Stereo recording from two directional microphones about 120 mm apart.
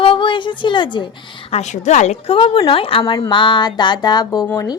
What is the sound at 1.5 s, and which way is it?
A woman's voice, 70° left (ahead or behind).